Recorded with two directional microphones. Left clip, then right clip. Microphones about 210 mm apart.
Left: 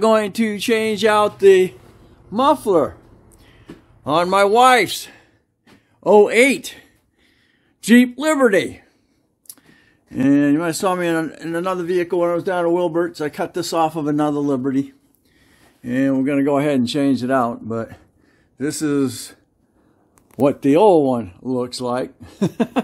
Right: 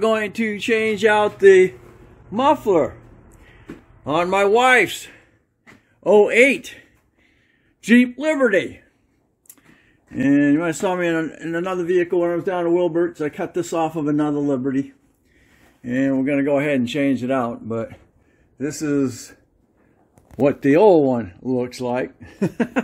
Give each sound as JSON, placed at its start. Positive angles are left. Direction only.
{"t": 0.0, "sound": "speech", "side_deg": 20}
{"t": 2.3, "sound": "speech", "side_deg": 20}
{"t": 10.1, "sound": "speech", "side_deg": 20}
{"t": 14.5, "sound": "speech", "side_deg": 20}
{"t": 20.3, "sound": "speech", "side_deg": 5}
{"t": 22.3, "sound": "speech", "side_deg": 15}